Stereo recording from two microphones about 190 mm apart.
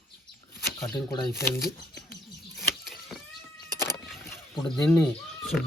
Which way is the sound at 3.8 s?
15° left (ahead or behind).